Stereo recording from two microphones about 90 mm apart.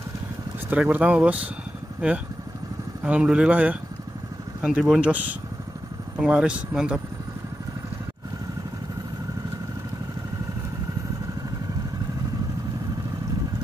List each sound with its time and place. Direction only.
0.7 s speech: 15° right (ahead or behind)
3.0 s speech: 10° right (ahead or behind)
6.1 s speech: 10° right (ahead or behind)